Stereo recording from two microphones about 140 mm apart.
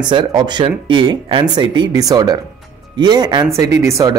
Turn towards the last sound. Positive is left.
turn(degrees=-20)  # may be behind; listen again after turning